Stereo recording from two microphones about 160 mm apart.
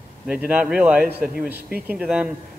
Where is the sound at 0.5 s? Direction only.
10° right (ahead or behind).